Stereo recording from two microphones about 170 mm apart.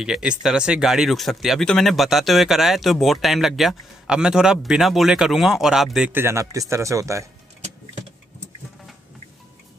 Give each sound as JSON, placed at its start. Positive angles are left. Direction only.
{"t": 0.0, "sound": "speech", "side_deg": -5}
{"t": 6.1, "sound": "speech", "side_deg": -15}